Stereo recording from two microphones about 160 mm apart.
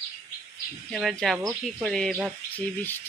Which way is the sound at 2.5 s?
10° left (ahead or behind).